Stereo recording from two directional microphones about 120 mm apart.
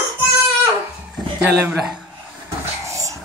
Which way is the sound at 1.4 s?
15° right (ahead or behind).